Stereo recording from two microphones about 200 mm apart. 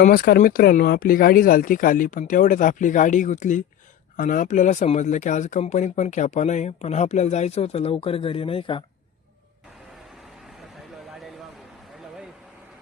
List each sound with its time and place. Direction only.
0.0 s speech: 45° left (ahead or behind); by 8.8 s 25° left (ahead or behind)